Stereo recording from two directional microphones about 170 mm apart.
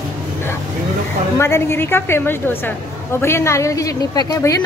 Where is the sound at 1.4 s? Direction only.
15° left (ahead or behind).